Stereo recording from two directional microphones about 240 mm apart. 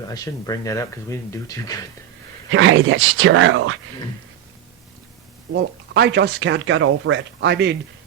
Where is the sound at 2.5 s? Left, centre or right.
Right.